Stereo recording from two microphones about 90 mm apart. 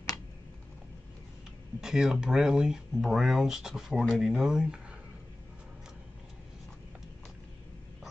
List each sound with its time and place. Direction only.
1.8 s speech: 5° right (ahead or behind)